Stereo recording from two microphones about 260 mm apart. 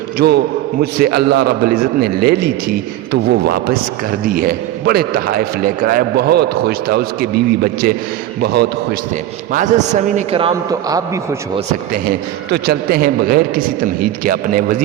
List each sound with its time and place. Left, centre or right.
0.2 s a man's voice: right; by 11.6 s centre
11.9 s a man's voice: right